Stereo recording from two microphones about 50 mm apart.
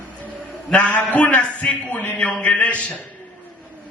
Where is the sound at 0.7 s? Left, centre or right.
Left.